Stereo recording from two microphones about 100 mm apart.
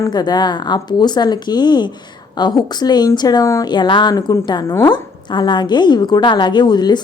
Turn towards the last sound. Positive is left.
turn(degrees=45)  # may be behind; listen again after turning